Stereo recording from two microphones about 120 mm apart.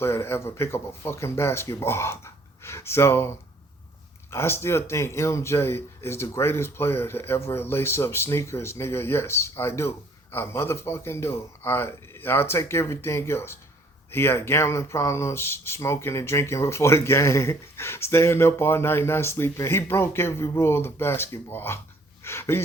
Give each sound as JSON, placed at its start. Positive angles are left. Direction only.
{"t": 0.0, "sound": "speech", "side_deg": 20}